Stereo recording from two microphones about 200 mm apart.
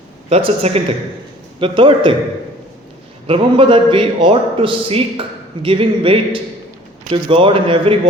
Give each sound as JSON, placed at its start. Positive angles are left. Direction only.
{"t": 0.3, "sound": "a man's voice", "side_deg": -30}
{"t": 3.2, "sound": "a man's voice", "side_deg": -25}